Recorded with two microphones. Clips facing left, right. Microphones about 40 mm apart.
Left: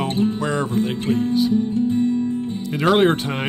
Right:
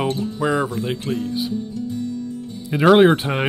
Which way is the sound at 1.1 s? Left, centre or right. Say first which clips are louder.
Left 4 dB; left.